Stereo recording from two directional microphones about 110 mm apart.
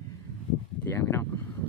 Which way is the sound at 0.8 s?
25° left (ahead or behind).